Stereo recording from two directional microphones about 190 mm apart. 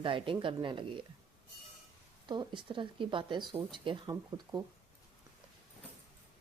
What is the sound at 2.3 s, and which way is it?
Speech, 25° right (ahead or behind).